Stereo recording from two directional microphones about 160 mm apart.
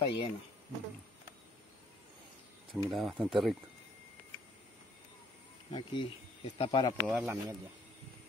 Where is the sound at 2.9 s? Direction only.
Centre (ahead or behind).